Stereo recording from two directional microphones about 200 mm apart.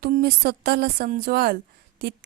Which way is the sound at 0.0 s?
50° right (ahead or behind).